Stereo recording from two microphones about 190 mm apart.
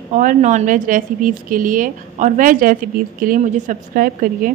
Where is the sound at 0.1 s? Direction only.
40° right (ahead or behind).